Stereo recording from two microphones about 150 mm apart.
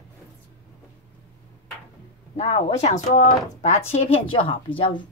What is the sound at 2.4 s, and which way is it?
Speech, 45° left (ahead or behind).